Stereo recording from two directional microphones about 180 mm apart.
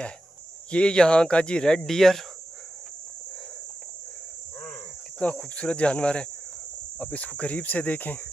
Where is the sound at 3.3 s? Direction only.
5° left (ahead or behind).